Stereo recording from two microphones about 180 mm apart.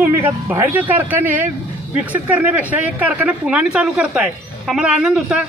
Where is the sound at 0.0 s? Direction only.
10° right (ahead or behind).